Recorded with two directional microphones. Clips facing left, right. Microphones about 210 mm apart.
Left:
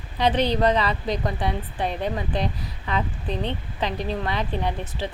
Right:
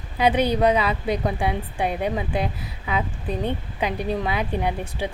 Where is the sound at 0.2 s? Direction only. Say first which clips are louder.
Right 2 dB; 10° right (ahead or behind).